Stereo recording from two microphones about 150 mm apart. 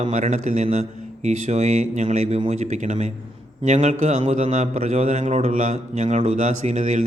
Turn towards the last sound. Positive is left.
turn(degrees=-55)  # may be behind; listen again after turning